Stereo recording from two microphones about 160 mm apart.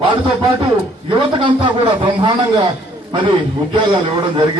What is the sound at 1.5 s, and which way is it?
A man's voice, 30° right (ahead or behind).